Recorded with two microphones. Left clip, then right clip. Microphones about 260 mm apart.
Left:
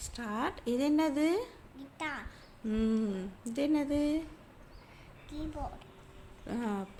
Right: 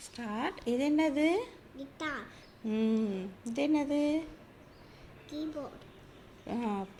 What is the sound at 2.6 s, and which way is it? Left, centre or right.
A woman's voice, left.